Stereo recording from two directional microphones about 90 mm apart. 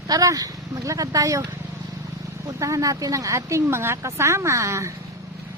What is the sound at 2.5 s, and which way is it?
Speech, 40° right (ahead or behind).